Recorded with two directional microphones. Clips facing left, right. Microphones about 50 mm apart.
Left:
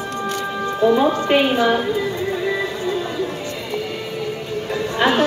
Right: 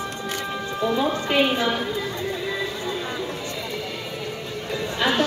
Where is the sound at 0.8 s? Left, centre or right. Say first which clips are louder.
Left 7 dB; left.